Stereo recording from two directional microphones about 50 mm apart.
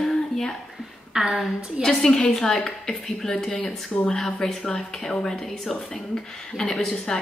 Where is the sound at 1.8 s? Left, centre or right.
Centre.